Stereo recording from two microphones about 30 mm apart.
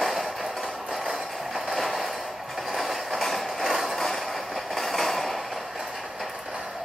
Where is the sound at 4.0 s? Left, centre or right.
Centre.